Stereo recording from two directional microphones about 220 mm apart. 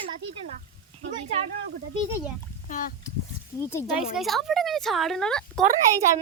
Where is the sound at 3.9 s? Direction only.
Centre (ahead or behind).